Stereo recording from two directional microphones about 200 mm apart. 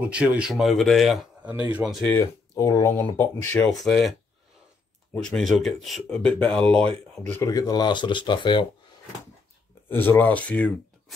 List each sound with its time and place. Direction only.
0.0 s speech: 5° right (ahead or behind)
2.1 s speech: 15° left (ahead or behind)
5.1 s speech: 5° left (ahead or behind); by 8.6 s 25° left (ahead or behind)
9.8 s speech: 10° left (ahead or behind)